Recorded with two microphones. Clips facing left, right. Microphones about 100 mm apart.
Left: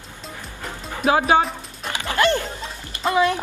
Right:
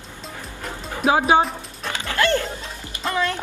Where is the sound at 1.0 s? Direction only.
25° right (ahead or behind).